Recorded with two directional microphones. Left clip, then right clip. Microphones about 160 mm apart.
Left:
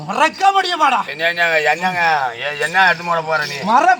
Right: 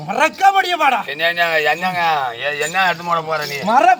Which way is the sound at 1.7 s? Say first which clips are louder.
Left 1 dB; 20° right (ahead or behind).